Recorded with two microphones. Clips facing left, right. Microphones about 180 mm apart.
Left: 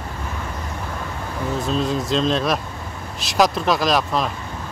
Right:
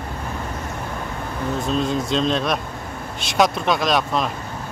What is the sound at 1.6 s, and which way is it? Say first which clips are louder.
A man's voice: even; centre (ahead or behind).